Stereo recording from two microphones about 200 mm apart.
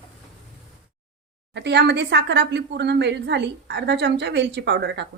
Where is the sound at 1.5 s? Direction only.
60° right (ahead or behind).